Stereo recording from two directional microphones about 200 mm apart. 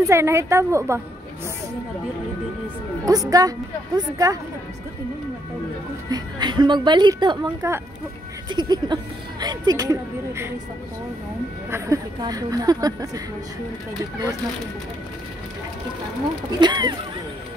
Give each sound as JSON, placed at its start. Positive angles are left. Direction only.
{"t": 0.0, "sound": "speech", "side_deg": -15}
{"t": 3.1, "sound": "speech", "side_deg": -20}
{"t": 6.0, "sound": "speech", "side_deg": -20}
{"t": 11.7, "sound": "speech", "side_deg": -15}
{"t": 16.5, "sound": "speech", "side_deg": -20}